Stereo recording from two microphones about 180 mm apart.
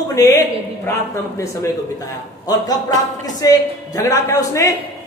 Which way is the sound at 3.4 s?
20° left (ahead or behind).